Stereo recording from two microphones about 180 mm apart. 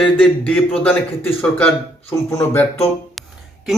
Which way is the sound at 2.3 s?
15° left (ahead or behind).